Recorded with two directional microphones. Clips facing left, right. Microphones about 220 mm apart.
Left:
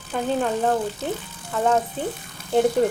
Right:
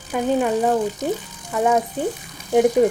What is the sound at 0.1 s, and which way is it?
A woman's voice, 10° right (ahead or behind).